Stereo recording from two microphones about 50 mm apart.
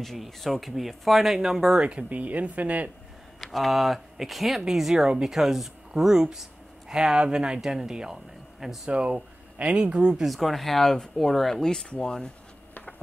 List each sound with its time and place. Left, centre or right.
0.0 s speech: centre
1.9 s speech: right
3.3 s speech: centre
8.9 s speech: right
10.2 s speech: centre